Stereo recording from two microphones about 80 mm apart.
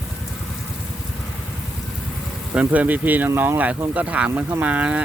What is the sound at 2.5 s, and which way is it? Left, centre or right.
Speech, centre.